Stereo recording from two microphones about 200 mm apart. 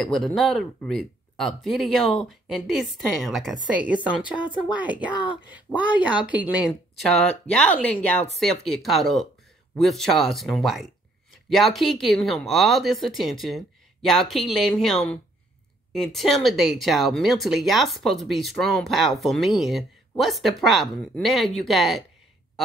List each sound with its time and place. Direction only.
0.0 s a woman's voice: centre (ahead or behind)
5.1 s speech: 25° left (ahead or behind)
5.8 s a woman's voice: 5° right (ahead or behind)